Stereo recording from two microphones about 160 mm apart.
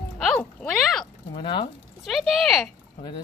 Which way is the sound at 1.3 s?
30° left (ahead or behind).